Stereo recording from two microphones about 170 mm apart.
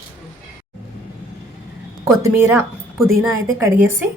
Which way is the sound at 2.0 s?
15° right (ahead or behind).